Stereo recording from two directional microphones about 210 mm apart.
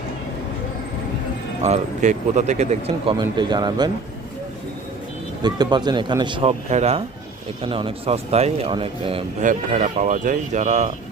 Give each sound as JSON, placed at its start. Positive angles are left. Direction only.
{"t": 1.6, "sound": "speech", "side_deg": -35}
{"t": 5.4, "sound": "speech", "side_deg": -20}
{"t": 9.5, "sound": "speech", "side_deg": -35}